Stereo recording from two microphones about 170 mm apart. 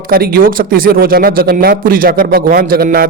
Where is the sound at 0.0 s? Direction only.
60° right (ahead or behind).